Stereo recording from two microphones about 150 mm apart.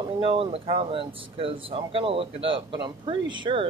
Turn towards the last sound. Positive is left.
turn(degrees=-35)  # may be behind; listen again after turning